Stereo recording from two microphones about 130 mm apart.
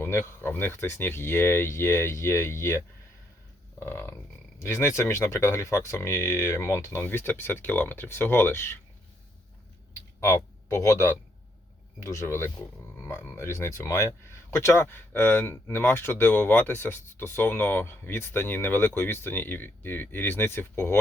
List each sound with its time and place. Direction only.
0.0 s speech: 20° left (ahead or behind)
10.2 s speech: 25° left (ahead or behind)